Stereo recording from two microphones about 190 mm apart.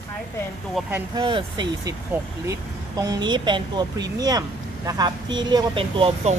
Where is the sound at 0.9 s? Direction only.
20° right (ahead or behind).